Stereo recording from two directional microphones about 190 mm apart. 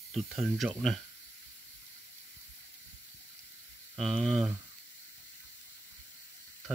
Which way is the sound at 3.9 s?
Centre (ahead or behind).